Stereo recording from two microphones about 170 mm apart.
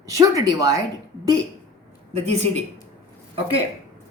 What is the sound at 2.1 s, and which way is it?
Speech, 40° right (ahead or behind).